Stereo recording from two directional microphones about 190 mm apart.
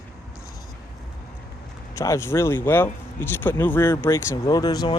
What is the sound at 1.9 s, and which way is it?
Speech, 15° left (ahead or behind).